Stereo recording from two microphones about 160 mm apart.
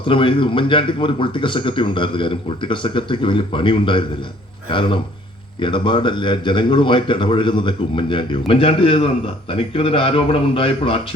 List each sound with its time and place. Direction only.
0.1 s speech: 30° left (ahead or behind)